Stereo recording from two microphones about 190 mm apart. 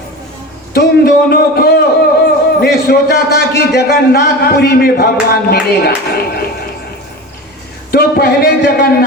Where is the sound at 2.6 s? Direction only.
55° left (ahead or behind).